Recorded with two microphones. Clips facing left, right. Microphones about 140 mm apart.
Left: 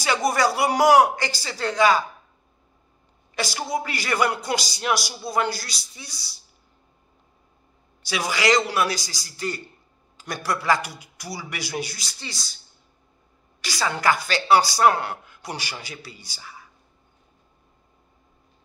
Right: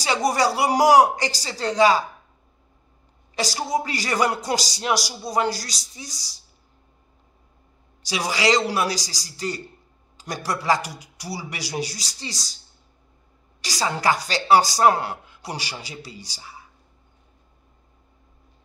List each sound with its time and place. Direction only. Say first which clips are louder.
0.0 s a man's voice: even; 35° right (ahead or behind)
3.3 s a woman's voice: right 2 dB; 35° right (ahead or behind)
8.1 s a man's voice: even; 35° right (ahead or behind)
13.6 s a man's voice: right 1 dB; 35° right (ahead or behind)